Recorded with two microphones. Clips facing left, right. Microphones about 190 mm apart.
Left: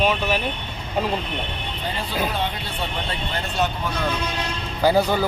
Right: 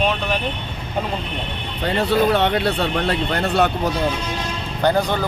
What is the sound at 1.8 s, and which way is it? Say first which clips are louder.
Speech: right 9 dB; 70° right (ahead or behind).